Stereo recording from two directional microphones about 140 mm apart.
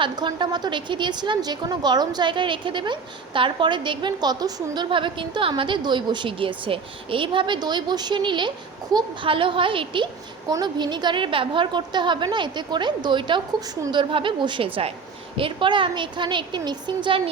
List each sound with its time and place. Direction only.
0.0 s a woman's voice: 35° right (ahead or behind)